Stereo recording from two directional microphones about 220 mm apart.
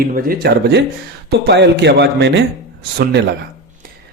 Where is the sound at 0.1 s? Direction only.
45° right (ahead or behind).